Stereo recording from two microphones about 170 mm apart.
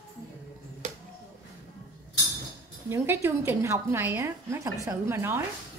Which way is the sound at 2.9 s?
15° right (ahead or behind).